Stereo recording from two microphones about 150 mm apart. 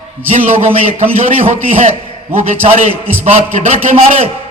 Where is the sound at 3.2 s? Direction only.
50° right (ahead or behind).